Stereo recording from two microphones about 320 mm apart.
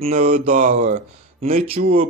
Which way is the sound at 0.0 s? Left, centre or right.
Right.